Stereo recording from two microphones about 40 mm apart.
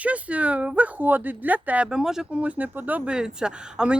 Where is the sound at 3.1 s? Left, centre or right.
Centre.